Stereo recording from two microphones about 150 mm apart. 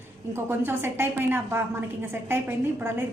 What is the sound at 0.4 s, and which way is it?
A woman's voice, 15° right (ahead or behind).